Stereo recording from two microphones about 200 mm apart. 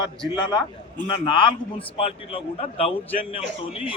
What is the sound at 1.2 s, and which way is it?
A man's voice, 25° left (ahead or behind).